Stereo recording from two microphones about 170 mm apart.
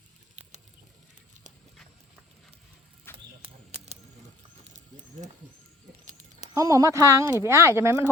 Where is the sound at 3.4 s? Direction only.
35° right (ahead or behind).